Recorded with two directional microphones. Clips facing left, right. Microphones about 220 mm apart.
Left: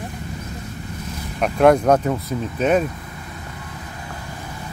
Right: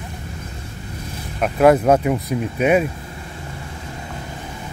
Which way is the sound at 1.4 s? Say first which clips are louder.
Right 1 dB; 5° right (ahead or behind).